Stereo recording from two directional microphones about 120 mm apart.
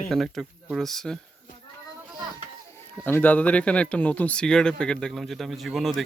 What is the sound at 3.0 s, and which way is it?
Speech, 15° left (ahead or behind).